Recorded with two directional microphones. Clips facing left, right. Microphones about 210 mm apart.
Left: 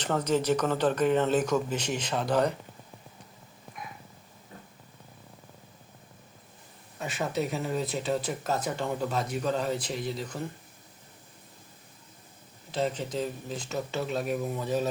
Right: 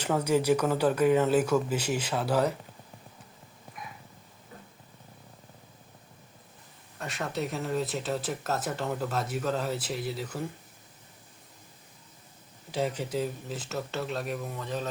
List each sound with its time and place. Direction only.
0.0 s speech: 10° right (ahead or behind)
7.0 s speech: centre (ahead or behind)
12.7 s speech: 10° right (ahead or behind); by 14.8 s 5° left (ahead or behind)